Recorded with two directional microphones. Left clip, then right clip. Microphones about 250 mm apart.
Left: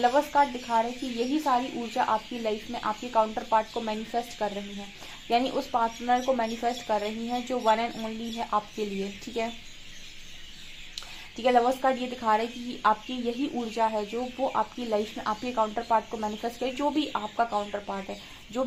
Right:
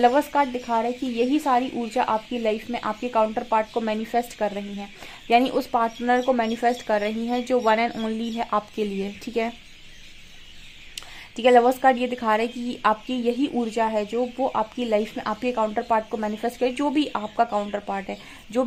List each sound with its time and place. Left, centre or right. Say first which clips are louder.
0.0 s speech: right 3 dB; right
11.3 s speech: right 6 dB; right